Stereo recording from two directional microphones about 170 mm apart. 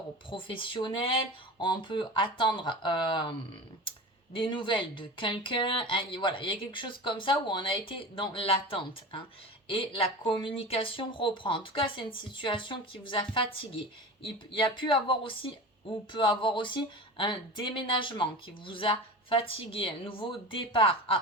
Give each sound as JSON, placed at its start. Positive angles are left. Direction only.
{"t": 0.3, "sound": "speech", "side_deg": 30}
{"t": 4.4, "sound": "speech", "side_deg": 30}